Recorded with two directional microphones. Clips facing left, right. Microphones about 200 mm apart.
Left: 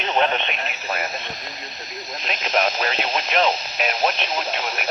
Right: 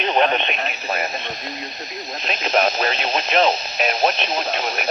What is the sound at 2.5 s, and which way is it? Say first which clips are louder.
Speech: right 3 dB; 40° right (ahead or behind).